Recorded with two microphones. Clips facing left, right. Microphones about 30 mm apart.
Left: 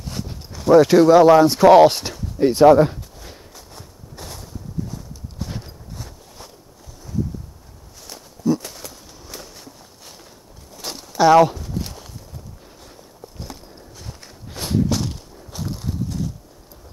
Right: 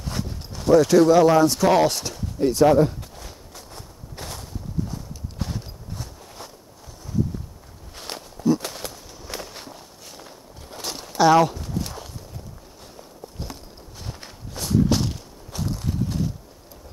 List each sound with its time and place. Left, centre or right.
0.0 s clip-clop: centre
0.7 s speech: left
4.2 s a sound: centre
8.4 s walk: right
10.7 s a sound: right
11.2 s speech: centre
14.5 s walk: left
14.9 s walk: centre
15.9 s a sound: centre